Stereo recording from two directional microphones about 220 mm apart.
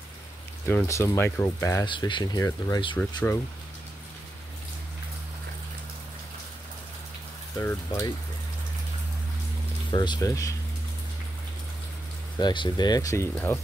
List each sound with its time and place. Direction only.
0.7 s speech: 10° left (ahead or behind)
7.6 s speech: 15° left (ahead or behind)
9.8 s speech: 20° left (ahead or behind)
12.4 s speech: 20° left (ahead or behind)